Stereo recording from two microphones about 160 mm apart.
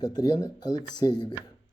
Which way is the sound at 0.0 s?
25° left (ahead or behind).